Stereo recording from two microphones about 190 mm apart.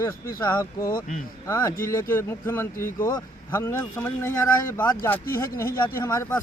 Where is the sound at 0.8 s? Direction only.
50° left (ahead or behind).